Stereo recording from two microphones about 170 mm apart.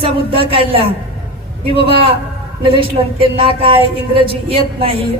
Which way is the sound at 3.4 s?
35° right (ahead or behind).